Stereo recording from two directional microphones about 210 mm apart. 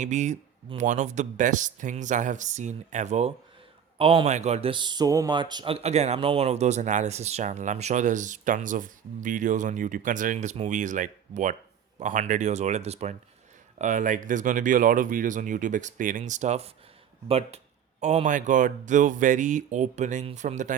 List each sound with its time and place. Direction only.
0.0 s a man's voice: 35° right (ahead or behind)